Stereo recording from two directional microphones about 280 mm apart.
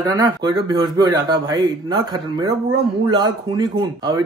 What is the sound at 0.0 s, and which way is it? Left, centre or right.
A man's voice, centre.